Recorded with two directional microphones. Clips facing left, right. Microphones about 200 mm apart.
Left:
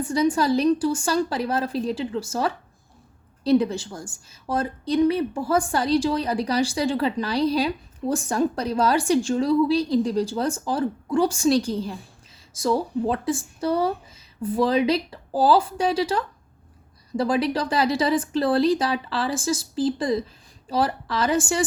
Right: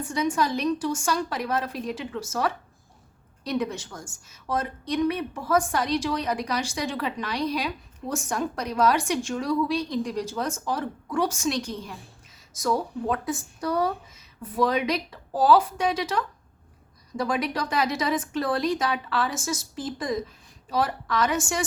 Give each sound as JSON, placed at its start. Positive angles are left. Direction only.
{"t": 0.0, "sound": "a woman's voice", "side_deg": 35}